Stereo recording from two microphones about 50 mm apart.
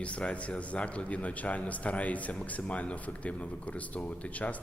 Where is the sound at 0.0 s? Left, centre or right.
Left.